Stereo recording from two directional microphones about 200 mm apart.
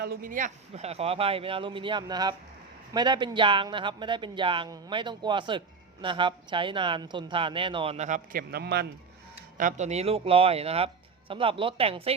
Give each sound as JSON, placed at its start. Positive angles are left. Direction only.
{"t": 0.0, "sound": "speech", "side_deg": -45}
{"t": 9.6, "sound": "speech", "side_deg": -40}